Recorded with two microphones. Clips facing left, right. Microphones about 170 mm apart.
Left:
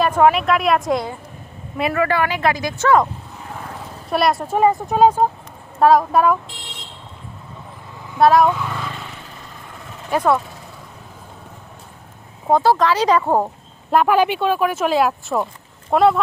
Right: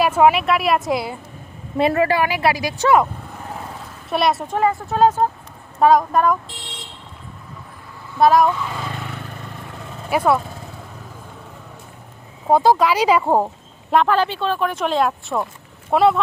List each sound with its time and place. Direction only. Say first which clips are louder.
0.0 s a woman's voice: even; 5° right (ahead or behind)
1.8 s speech: right 3 dB; 30° right (ahead or behind)
2.0 s speech: even; 15° right (ahead or behind)
4.1 s a woman's voice: left 1 dB; centre (ahead or behind)
4.5 s a woman's voice: left 3 dB; 20° left (ahead or behind)
8.2 s a woman's voice: left 1 dB; centre (ahead or behind)
8.9 s vehicle: right 3 dB; 55° right (ahead or behind)
10.1 s speech: even; 5° right (ahead or behind)
12.5 s speech: right 1 dB; 10° right (ahead or behind)
13.9 s a woman's voice: left 2 dB; 10° left (ahead or behind)